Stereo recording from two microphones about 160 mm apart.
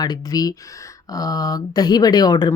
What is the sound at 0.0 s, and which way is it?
Speech, 25° left (ahead or behind).